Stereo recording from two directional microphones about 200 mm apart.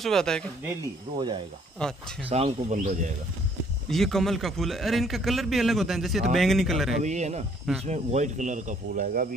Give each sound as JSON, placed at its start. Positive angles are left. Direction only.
{"t": 0.0, "sound": "a man's voice", "side_deg": 5}
{"t": 1.1, "sound": "speech", "side_deg": -25}
{"t": 1.8, "sound": "a man's voice", "side_deg": 5}
{"t": 2.2, "sound": "speech", "side_deg": -30}
{"t": 3.9, "sound": "a man's voice", "side_deg": 0}
{"t": 7.0, "sound": "speech", "side_deg": -35}